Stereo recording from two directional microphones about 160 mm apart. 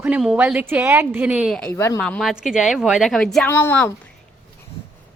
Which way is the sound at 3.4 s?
15° left (ahead or behind).